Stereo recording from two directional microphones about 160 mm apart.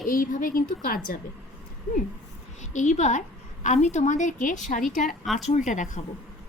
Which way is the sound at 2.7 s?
50° left (ahead or behind).